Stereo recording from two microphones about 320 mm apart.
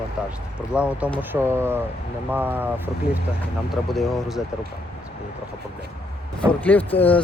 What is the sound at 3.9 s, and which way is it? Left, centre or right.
Speech, centre.